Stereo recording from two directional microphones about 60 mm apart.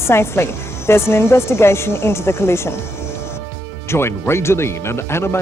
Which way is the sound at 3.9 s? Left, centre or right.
Left.